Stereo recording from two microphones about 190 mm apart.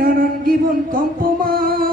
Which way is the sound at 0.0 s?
50° right (ahead or behind).